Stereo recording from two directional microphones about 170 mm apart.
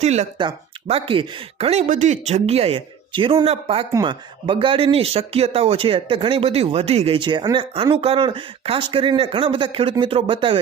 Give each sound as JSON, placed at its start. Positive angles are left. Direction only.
{"t": 0.0, "sound": "speech", "side_deg": -40}